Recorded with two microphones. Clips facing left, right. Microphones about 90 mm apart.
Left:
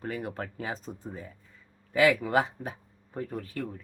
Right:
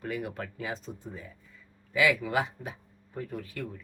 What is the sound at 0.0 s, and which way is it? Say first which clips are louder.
Speech: even; 35° left (ahead or behind).